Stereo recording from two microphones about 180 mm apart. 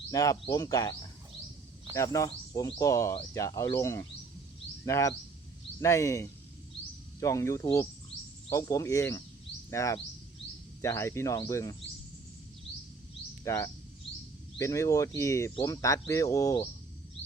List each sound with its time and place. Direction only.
0.1 s speech: 20° left (ahead or behind)
2.0 s speech: 20° left (ahead or behind)
13.4 s speech: 15° left (ahead or behind)